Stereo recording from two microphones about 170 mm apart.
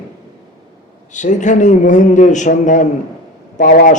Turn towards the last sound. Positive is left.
turn(degrees=55)  # may be behind; listen again after turning